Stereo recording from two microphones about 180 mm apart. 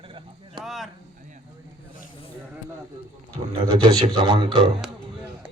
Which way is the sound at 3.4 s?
35° right (ahead or behind).